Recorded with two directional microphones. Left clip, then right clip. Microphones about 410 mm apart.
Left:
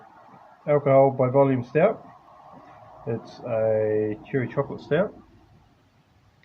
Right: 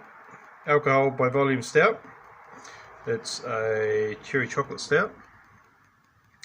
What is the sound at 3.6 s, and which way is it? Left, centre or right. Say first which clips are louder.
Speech: left 3 dB; left.